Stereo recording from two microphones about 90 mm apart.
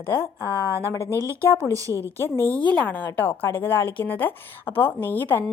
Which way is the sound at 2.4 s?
20° left (ahead or behind).